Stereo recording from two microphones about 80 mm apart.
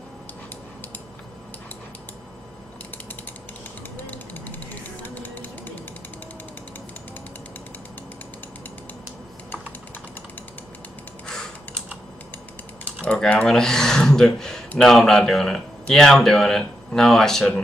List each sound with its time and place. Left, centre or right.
3.9 s mechanisms: left
5.0 s a sound: left
13.0 s a man's voice: centre